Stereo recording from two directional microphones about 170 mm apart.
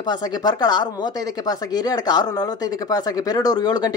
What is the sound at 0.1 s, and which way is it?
Speech, 25° left (ahead or behind).